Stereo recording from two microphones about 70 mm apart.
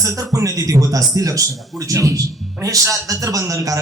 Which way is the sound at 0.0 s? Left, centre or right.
Right.